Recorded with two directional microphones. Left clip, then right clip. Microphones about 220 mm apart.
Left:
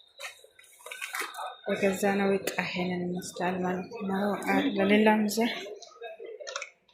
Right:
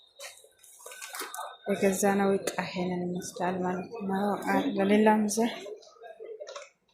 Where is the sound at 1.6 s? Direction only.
10° right (ahead or behind).